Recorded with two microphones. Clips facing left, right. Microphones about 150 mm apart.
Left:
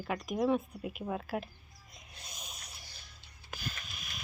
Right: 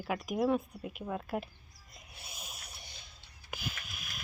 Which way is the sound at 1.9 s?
5° right (ahead or behind).